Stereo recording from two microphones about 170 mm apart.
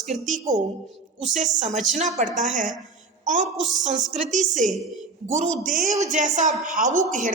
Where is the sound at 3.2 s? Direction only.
45° right (ahead or behind).